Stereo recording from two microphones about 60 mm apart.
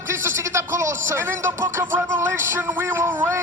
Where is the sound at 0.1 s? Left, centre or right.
Right.